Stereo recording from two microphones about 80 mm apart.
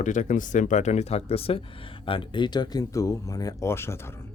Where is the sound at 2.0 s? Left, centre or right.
Left.